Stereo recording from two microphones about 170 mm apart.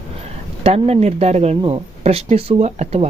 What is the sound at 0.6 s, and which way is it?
Speech, 35° right (ahead or behind).